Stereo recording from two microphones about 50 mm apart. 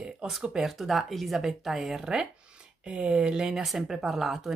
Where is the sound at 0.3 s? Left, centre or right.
Centre.